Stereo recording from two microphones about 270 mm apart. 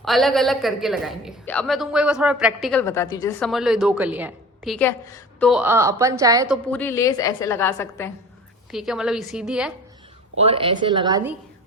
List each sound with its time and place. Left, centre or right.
0.0 s a man's voice: centre
3.4 s a man's voice: centre
5.5 s a woman's voice: centre
6.5 s a woman's voice: centre
8.7 s a man's voice: centre
10.3 s a woman's voice: right